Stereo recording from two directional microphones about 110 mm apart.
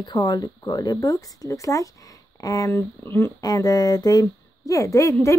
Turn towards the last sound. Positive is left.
turn(degrees=30)  # may be behind; listen again after turning